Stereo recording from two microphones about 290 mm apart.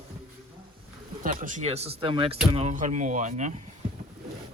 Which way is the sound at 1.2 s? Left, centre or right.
Right.